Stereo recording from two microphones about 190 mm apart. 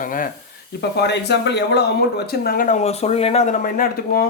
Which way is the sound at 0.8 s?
60° left (ahead or behind).